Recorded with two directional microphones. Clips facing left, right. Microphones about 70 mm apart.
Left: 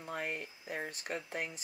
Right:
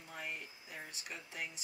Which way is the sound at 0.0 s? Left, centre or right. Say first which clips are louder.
Left 7 dB; left.